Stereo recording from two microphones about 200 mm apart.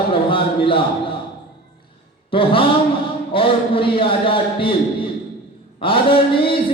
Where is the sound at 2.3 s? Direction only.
25° left (ahead or behind).